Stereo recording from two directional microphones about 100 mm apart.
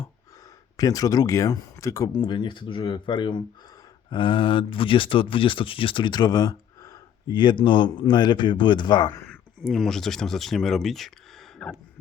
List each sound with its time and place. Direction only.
0.8 s speech: 35° left (ahead or behind)
2.1 s speech: 50° left (ahead or behind); by 7.0 s 35° left (ahead or behind)
7.3 s speech: 50° left (ahead or behind)
9.6 s speech: 5° left (ahead or behind)